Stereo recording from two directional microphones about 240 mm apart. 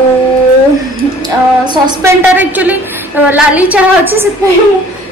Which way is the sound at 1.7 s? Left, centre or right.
Centre.